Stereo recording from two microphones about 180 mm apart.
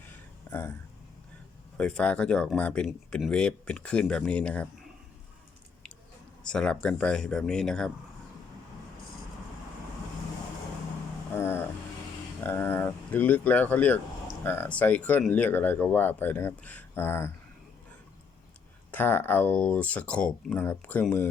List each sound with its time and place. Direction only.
0.5 s a sound: 20° left (ahead or behind)
1.8 s speech: 5° left (ahead or behind)
6.4 s speech: 5° left (ahead or behind)
11.3 s music: 15° left (ahead or behind)
12.4 s speech: 10° left (ahead or behind)
18.9 s speech: 10° left (ahead or behind)